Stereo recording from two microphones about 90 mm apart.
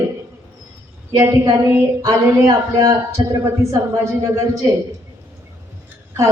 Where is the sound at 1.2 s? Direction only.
40° right (ahead or behind).